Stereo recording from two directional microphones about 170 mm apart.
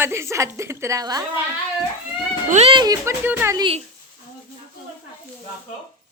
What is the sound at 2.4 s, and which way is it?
Speech, 40° right (ahead or behind).